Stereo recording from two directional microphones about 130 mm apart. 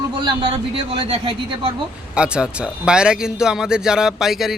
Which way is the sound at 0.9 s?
45° right (ahead or behind).